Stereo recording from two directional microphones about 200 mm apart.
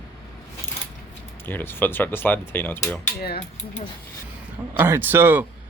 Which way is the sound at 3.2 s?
50° left (ahead or behind).